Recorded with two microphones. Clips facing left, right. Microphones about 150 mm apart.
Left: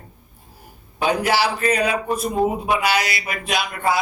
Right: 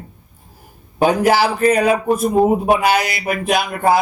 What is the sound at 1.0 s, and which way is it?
A man's voice, 45° right (ahead or behind).